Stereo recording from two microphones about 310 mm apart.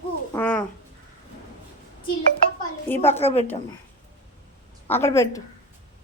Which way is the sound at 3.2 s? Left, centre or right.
Centre.